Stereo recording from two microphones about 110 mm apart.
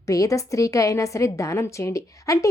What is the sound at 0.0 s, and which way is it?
A woman's voice, 30° left (ahead or behind).